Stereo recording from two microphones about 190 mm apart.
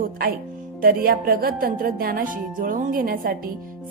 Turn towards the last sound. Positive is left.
turn(degrees=-50)  # may be behind; listen again after turning